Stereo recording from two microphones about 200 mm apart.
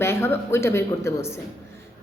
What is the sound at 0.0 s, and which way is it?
A woman's voice, 10° left (ahead or behind).